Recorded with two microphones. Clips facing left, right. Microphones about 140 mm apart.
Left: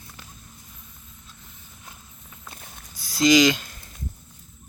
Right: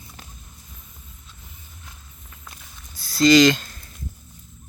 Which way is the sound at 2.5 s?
50° left (ahead or behind).